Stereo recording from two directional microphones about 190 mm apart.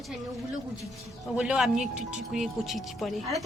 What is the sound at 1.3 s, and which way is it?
Speech, 5° right (ahead or behind).